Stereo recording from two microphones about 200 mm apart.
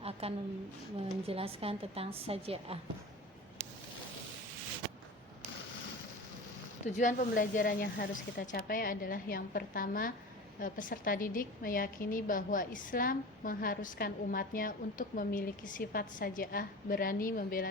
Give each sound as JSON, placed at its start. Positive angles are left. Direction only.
{"t": 0.0, "sound": "a sound", "side_deg": -30}
{"t": 1.3, "sound": "a woman's voice", "side_deg": -30}
{"t": 6.9, "sound": "a woman's voice", "side_deg": 40}